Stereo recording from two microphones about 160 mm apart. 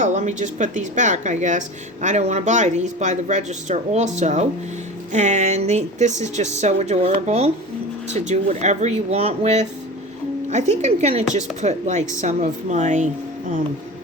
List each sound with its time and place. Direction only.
0.0 s speech: 50° right (ahead or behind)